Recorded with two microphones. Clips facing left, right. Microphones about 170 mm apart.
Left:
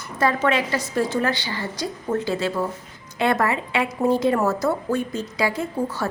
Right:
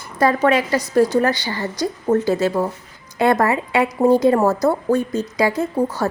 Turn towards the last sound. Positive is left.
turn(degrees=-40)  # may be behind; listen again after turning